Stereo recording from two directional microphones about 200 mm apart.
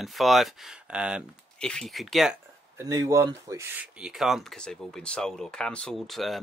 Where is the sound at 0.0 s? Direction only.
Centre (ahead or behind).